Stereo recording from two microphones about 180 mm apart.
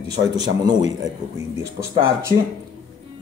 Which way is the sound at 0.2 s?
20° right (ahead or behind).